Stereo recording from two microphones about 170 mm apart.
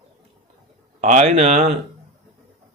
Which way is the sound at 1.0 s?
45° right (ahead or behind).